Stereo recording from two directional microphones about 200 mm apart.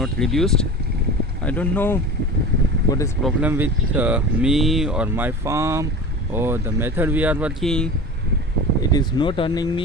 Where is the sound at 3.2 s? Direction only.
10° right (ahead or behind).